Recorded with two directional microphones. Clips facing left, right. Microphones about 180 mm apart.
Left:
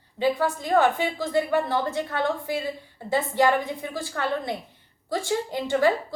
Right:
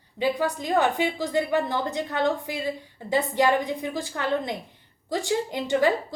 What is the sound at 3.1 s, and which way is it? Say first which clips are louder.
A woman's voice: even; 15° right (ahead or behind).